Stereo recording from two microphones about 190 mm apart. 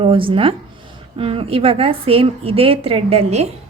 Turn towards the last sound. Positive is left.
turn(degrees=-35)  # may be behind; listen again after turning